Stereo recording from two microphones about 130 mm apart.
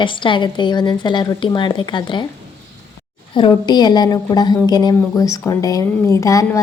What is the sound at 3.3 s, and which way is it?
A woman's voice, 35° left (ahead or behind).